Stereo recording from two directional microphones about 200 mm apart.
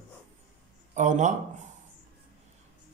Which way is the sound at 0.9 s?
40° right (ahead or behind).